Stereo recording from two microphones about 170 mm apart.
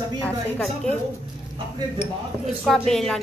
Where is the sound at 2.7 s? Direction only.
Centre (ahead or behind).